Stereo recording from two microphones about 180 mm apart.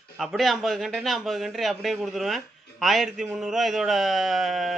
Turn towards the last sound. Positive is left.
turn(degrees=0)  # may be behind; listen again after turning